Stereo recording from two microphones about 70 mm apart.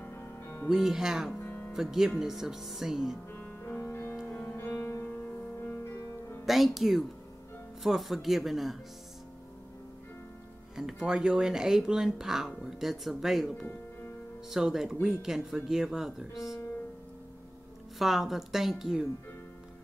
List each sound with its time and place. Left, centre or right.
0.0 s music: left
0.7 s speech: centre
3.3 s music: left
4.7 s music: left
6.4 s speech: centre
10.8 s speech: centre
17.9 s speech: centre